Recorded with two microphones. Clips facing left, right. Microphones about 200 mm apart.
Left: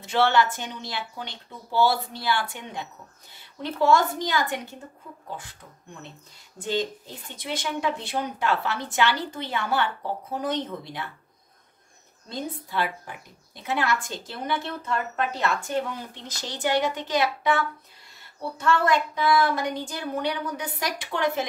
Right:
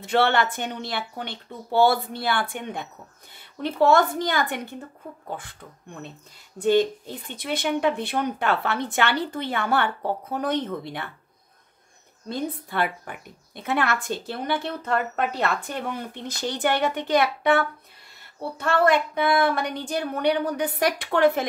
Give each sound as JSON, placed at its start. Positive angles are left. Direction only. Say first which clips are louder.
{"t": 0.0, "sound": "a woman's voice", "louder": "right 1 dB", "side_deg": -55}
{"t": 6.6, "sound": "a woman's voice", "louder": "right 8 dB", "side_deg": -60}
{"t": 12.3, "sound": "a woman's voice", "louder": "right 4 dB", "side_deg": -55}